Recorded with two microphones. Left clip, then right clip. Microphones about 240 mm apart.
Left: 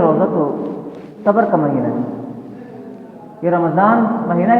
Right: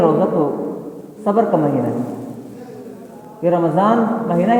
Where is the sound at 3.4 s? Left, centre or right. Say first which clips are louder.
Left 1 dB; right.